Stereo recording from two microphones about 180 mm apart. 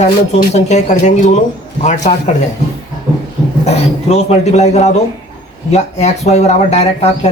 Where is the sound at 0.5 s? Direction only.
40° left (ahead or behind).